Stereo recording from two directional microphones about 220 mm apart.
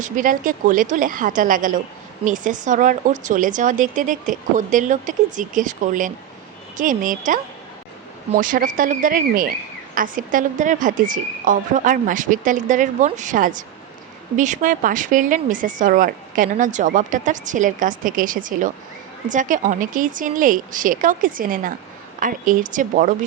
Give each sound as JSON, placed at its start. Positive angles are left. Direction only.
{"t": 0.0, "sound": "speech", "side_deg": -40}
{"t": 8.4, "sound": "speech", "side_deg": -40}